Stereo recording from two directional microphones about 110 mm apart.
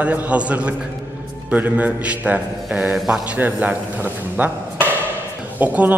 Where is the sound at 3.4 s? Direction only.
15° right (ahead or behind).